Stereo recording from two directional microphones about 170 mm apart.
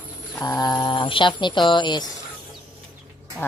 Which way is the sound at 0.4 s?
20° left (ahead or behind).